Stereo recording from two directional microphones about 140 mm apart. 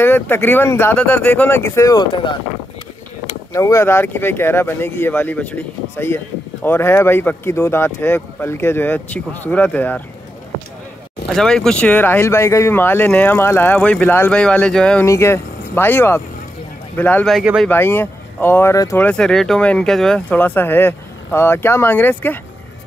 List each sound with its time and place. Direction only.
0.0 s speech: 15° left (ahead or behind)
3.5 s speech: 20° left (ahead or behind)
11.2 s speech: 5° left (ahead or behind)
15.0 s speech: 20° left (ahead or behind)
17.3 s speech: 5° right (ahead or behind)
17.6 s speech: 15° left (ahead or behind)
19.0 s speech: 5° left (ahead or behind)